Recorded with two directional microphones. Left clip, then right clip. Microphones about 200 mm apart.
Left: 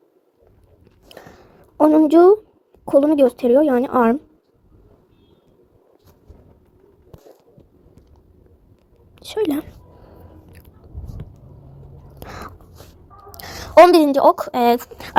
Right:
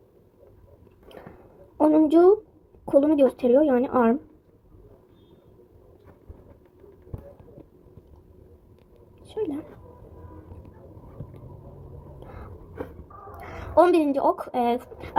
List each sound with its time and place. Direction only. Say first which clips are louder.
1.0 s biting: left 3 dB; 50° left (ahead or behind)
1.8 s a woman's voice: left 6 dB; 45° left (ahead or behind)
2.8 s a woman's voice: left 5 dB; 40° left (ahead or behind)
9.2 s a sound: left 9 dB; 50° left (ahead or behind)
12.2 s biting: left 12 dB; 55° left (ahead or behind)
13.4 s a woman's voice: left 10 dB; 45° left (ahead or behind)